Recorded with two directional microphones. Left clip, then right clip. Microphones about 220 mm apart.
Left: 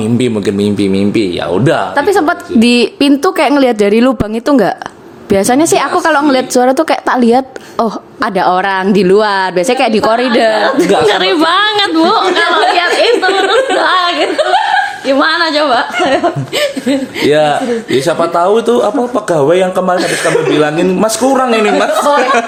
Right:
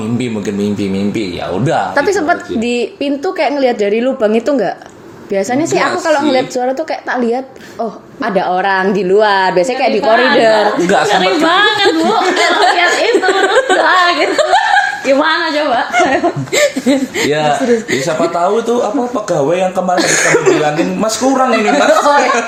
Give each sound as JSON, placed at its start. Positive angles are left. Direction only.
{"t": 0.2, "sound": "a woman's voice", "side_deg": 45}
{"t": 2.2, "sound": "a woman's voice", "side_deg": 45}
{"t": 13.8, "sound": "speech", "side_deg": 15}
{"t": 16.6, "sound": "chuckle", "side_deg": -20}
{"t": 18.3, "sound": "a woman's voice", "side_deg": 50}
{"t": 21.0, "sound": "a woman's voice", "side_deg": 50}